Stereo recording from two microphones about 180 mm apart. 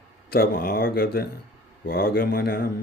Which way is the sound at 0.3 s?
55° left (ahead or behind).